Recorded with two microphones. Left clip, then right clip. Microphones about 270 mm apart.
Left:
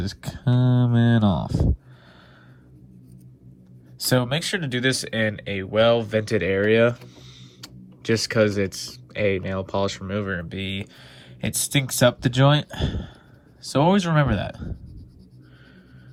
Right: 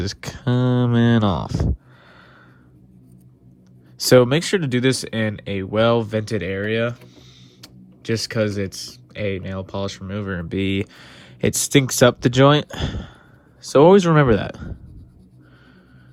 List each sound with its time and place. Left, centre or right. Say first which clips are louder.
0.0 s a sound: right 5 dB; right
0.6 s speech: right 4 dB; left
4.0 s speech: right 9 dB; right; by 10.4 s centre
10.5 s speech: right 7 dB; right